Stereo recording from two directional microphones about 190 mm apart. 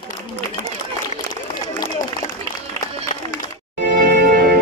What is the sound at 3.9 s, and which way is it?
Music, 50° right (ahead or behind).